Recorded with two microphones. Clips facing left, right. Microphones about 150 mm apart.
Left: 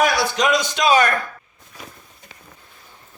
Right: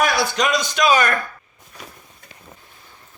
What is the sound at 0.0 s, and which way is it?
A man's voice, 20° left (ahead or behind).